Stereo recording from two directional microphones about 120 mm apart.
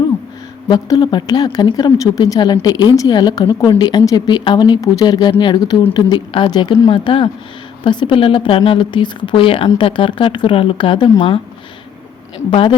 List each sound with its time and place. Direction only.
0.7 s a woman's voice: 35° left (ahead or behind)
12.5 s speech: 50° left (ahead or behind)